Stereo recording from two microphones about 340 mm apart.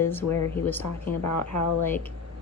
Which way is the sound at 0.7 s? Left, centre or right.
Centre.